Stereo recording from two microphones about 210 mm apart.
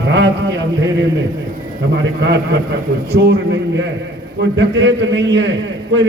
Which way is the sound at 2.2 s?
55° right (ahead or behind).